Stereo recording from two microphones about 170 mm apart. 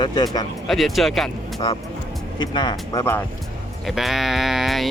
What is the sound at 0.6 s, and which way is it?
Speech, centre (ahead or behind).